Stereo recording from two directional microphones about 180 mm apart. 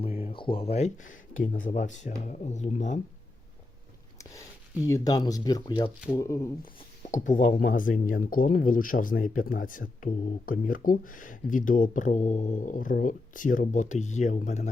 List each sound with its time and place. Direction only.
0.0 s speech: 30° left (ahead or behind)
1.3 s speech: 45° left (ahead or behind)
4.9 s speech: 20° left (ahead or behind)
6.7 s speech: 45° left (ahead or behind)